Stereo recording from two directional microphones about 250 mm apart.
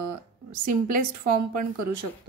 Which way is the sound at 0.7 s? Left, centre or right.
Right.